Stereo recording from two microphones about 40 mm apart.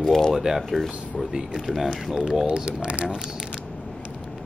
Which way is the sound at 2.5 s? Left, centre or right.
Right.